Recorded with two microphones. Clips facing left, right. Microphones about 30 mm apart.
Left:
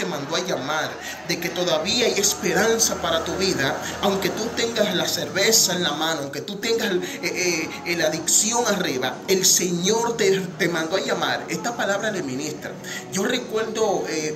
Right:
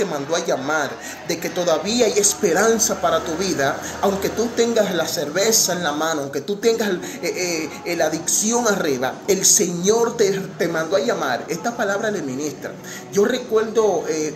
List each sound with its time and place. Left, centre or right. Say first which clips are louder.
0.0 s speech: right 4 dB; left
7.3 s speech: left 2 dB; left
7.9 s speech: right 2 dB; left
8.6 s speech: right 3 dB; left
13.1 s speech: right 6 dB; left